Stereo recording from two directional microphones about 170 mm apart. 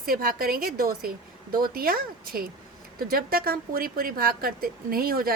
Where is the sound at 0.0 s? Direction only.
60° right (ahead or behind).